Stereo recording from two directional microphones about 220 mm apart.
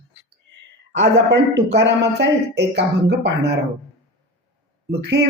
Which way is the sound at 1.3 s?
50° right (ahead or behind).